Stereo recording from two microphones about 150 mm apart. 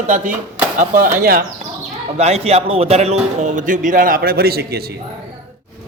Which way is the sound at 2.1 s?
45° right (ahead or behind).